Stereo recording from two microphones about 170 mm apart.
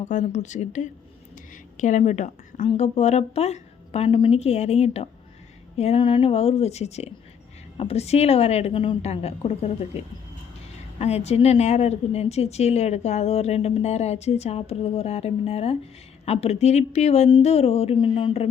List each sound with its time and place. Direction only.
0.0 s speech: 45° left (ahead or behind)